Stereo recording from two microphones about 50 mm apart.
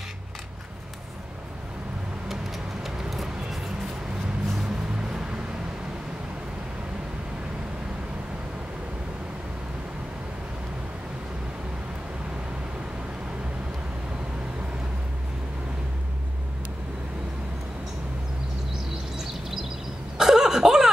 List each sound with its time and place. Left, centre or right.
2.2 s vehicle: centre
4.5 s music: centre
20.2 s a sound: centre